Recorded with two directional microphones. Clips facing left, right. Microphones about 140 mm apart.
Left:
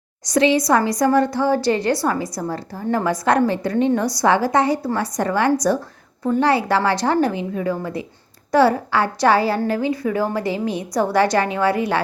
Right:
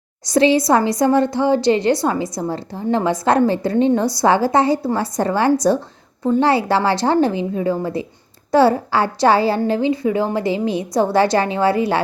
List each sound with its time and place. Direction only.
0.3 s a woman's voice: 30° right (ahead or behind)